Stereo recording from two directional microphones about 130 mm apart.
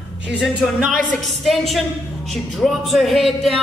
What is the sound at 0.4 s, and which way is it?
A woman's voice, centre (ahead or behind).